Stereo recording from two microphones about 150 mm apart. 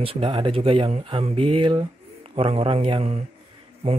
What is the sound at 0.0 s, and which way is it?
Speech, 35° right (ahead or behind).